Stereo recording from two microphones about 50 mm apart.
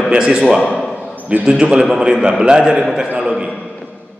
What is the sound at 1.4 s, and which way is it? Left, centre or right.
A man's voice, centre.